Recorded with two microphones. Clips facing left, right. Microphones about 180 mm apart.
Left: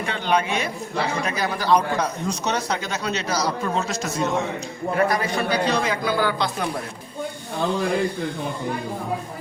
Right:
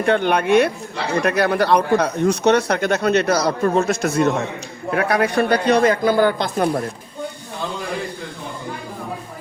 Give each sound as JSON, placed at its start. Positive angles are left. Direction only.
{"t": 0.0, "sound": "speech", "side_deg": -55}